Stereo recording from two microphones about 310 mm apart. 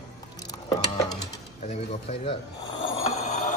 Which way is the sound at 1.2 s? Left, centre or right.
Left.